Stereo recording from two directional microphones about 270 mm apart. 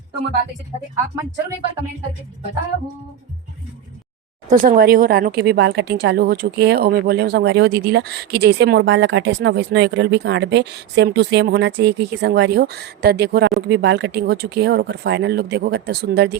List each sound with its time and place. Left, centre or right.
4.4 s speech: right